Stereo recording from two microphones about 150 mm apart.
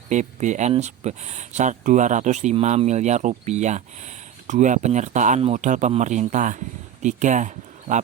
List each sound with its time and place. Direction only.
0.1 s a man's voice: 55° right (ahead or behind)